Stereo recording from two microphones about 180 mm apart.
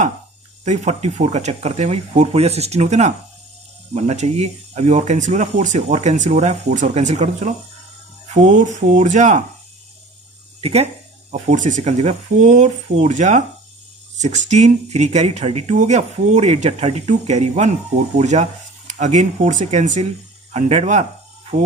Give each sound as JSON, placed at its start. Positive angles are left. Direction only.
{"t": 0.6, "sound": "speech", "side_deg": -40}
{"t": 10.6, "sound": "speech", "side_deg": -35}